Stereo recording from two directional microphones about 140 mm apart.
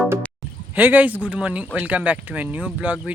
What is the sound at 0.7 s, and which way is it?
Speech, 10° right (ahead or behind).